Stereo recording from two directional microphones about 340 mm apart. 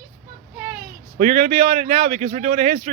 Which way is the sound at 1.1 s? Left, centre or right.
Right.